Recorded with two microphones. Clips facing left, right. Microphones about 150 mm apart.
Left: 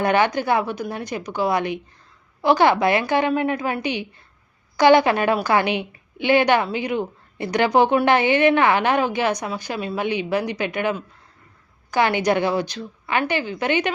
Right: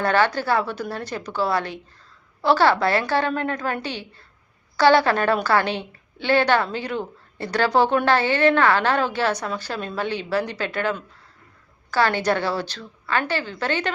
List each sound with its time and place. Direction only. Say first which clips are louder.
0.0 s a woman's voice: left 1 dB; 15° left (ahead or behind)